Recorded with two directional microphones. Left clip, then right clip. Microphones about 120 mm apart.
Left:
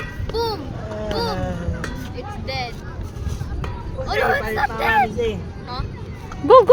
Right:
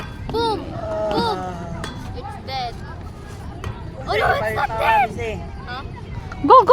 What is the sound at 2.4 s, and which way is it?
Vehicle, 75° right (ahead or behind).